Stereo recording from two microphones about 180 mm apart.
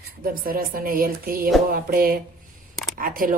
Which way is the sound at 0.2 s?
55° right (ahead or behind).